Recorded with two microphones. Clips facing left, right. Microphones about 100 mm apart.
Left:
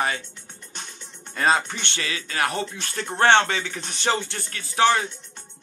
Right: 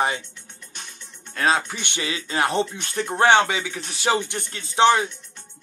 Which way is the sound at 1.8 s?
15° right (ahead or behind).